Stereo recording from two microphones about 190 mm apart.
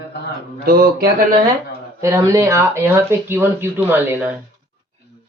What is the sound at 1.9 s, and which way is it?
Speech, 15° right (ahead or behind).